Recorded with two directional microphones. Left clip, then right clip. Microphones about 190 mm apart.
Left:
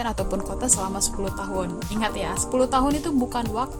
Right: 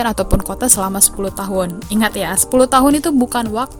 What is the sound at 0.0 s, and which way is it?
Speech, 45° right (ahead or behind).